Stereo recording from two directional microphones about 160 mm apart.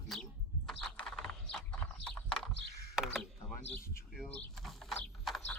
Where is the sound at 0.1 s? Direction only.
Centre (ahead or behind).